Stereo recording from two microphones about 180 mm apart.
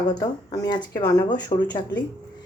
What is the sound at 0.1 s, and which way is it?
A woman's voice, 20° left (ahead or behind).